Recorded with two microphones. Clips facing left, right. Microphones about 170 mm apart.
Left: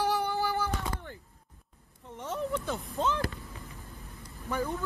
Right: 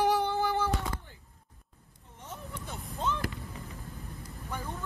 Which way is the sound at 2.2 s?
90° left.